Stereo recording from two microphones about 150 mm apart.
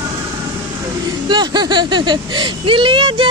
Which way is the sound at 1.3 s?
30° right (ahead or behind).